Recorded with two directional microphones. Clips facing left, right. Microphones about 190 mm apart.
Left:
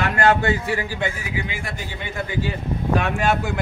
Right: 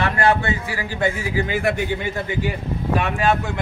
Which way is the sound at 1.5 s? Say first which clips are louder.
Right 11 dB; 60° right (ahead or behind).